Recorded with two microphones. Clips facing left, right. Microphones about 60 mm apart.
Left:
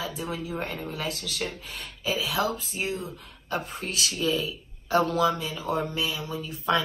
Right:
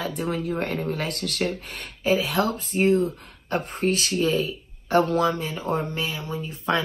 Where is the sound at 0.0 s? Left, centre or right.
Right.